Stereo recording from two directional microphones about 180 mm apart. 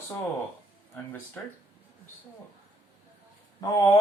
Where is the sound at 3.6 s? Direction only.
20° left (ahead or behind).